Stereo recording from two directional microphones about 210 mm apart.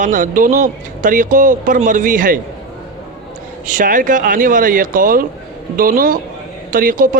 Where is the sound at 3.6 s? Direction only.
40° right (ahead or behind).